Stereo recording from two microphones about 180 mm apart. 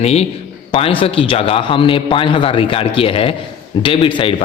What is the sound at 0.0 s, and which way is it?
A man's voice, 35° left (ahead or behind).